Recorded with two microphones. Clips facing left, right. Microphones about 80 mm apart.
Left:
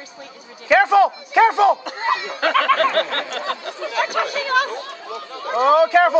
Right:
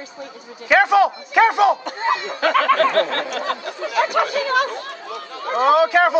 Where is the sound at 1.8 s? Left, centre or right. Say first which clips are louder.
Right 1 dB; right.